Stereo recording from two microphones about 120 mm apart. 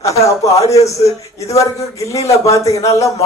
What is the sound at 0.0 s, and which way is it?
A man's voice, 25° left (ahead or behind).